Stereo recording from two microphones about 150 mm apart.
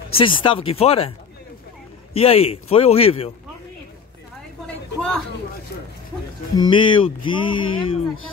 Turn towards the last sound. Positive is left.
turn(degrees=35)  # may be behind; listen again after turning